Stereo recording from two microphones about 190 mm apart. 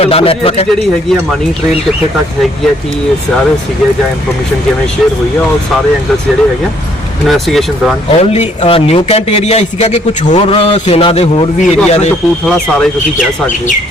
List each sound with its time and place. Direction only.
0.0 s a man's voice: 30° left (ahead or behind)
7.3 s speech: centre (ahead or behind)
8.1 s a man's voice: 35° left (ahead or behind)
12.5 s speech: centre (ahead or behind)